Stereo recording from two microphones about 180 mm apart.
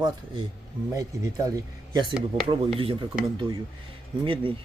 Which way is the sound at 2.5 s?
30° right (ahead or behind).